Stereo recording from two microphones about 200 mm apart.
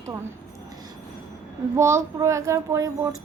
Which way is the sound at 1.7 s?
15° right (ahead or behind).